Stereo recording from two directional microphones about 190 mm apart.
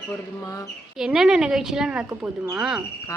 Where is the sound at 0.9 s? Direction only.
Centre (ahead or behind).